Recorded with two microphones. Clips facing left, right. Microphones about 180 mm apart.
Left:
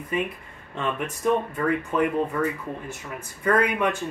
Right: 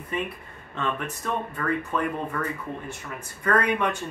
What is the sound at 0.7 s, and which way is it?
Speech, 15° left (ahead or behind).